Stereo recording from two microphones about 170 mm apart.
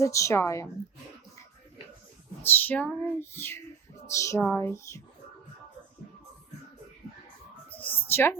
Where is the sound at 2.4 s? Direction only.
10° left (ahead or behind).